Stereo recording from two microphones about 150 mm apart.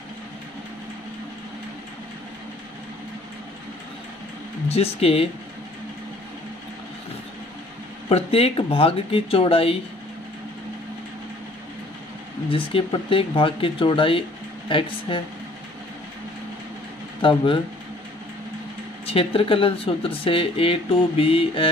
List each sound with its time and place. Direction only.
4.6 s speech: 40° left (ahead or behind)
8.1 s speech: 40° left (ahead or behind)
12.4 s speech: 35° left (ahead or behind)
17.2 s speech: 35° left (ahead or behind)
19.0 s speech: 40° left (ahead or behind)